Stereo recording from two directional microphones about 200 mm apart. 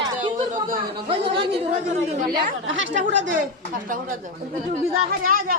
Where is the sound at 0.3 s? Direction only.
40° right (ahead or behind).